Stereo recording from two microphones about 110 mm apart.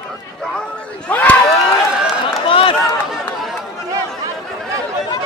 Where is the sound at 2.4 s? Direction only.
55° left (ahead or behind).